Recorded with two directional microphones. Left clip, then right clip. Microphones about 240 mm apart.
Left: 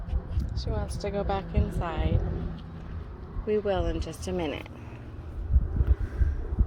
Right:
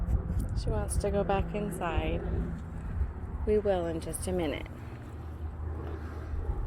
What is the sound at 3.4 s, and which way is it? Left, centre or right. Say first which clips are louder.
Speech: left 1 dB; centre.